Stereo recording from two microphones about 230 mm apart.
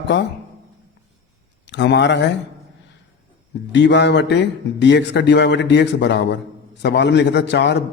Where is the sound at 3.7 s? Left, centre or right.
Left.